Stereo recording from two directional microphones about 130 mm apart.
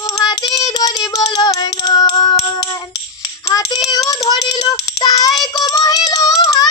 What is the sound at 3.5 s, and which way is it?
Child singing, 25° left (ahead or behind).